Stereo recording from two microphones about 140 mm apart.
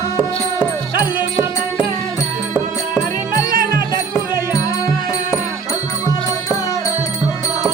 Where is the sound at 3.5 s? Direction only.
90° right.